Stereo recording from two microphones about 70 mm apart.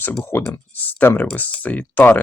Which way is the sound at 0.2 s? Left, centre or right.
Left.